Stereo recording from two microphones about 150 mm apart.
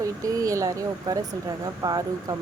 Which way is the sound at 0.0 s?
25° right (ahead or behind).